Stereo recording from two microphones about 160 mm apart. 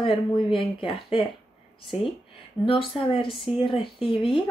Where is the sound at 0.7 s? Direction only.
35° left (ahead or behind).